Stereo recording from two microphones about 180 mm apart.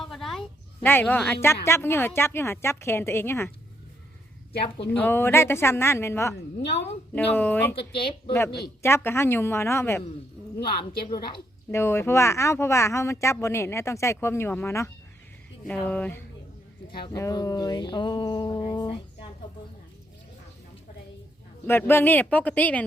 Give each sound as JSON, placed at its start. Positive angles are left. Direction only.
{"t": 0.0, "sound": "a woman's voice", "side_deg": 0}
{"t": 4.9, "sound": "speech", "side_deg": 10}
{"t": 6.6, "sound": "a woman's voice", "side_deg": 75}
{"t": 7.2, "sound": "speech", "side_deg": 10}
{"t": 8.8, "sound": "speech", "side_deg": 15}
{"t": 11.7, "sound": "speech", "side_deg": 15}
{"t": 17.1, "sound": "a sound", "side_deg": 20}
{"t": 21.7, "sound": "speech", "side_deg": 10}